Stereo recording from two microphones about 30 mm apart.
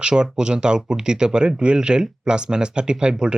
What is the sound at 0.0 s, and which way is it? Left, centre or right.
Speech, right.